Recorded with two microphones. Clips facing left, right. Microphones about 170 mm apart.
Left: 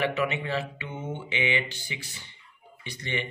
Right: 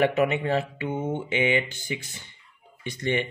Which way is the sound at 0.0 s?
50° right (ahead or behind).